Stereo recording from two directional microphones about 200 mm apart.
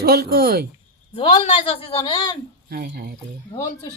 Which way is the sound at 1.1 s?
25° left (ahead or behind).